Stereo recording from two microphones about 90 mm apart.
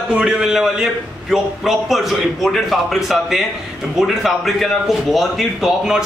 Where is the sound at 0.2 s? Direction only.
5° right (ahead or behind).